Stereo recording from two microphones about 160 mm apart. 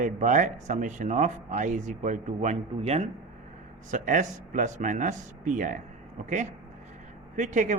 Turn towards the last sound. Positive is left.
turn(degrees=-50)  # may be behind; listen again after turning